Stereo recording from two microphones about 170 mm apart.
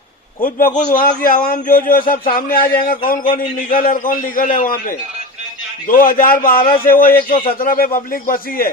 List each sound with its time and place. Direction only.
0.4 s a man's voice: 50° left (ahead or behind)